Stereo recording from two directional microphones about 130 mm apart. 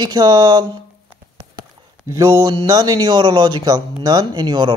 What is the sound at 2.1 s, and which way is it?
A man's voice, 25° right (ahead or behind).